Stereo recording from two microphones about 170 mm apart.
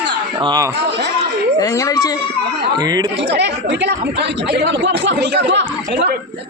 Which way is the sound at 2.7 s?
25° right (ahead or behind).